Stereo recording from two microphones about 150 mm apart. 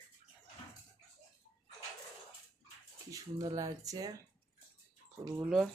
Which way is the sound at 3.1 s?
25° right (ahead or behind).